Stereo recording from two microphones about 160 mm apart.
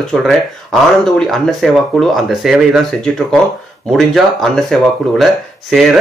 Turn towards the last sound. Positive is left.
turn(degrees=0)  # may be behind; listen again after turning